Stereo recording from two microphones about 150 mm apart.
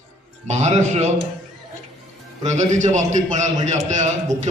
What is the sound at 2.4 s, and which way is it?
A man's voice, 50° right (ahead or behind).